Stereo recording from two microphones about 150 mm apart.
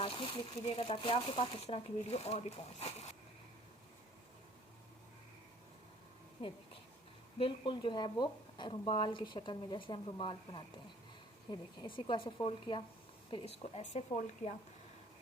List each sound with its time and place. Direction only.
0.0 s a woman's voice: 35° left (ahead or behind)
6.4 s a woman's voice: 40° left (ahead or behind)